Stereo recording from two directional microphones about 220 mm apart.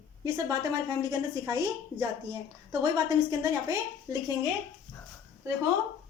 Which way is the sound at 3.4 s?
15° right (ahead or behind).